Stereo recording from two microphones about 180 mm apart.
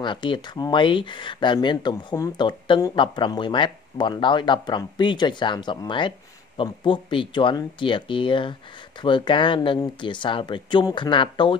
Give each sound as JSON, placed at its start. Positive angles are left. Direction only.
{"t": 0.0, "sound": "speech", "side_deg": 25}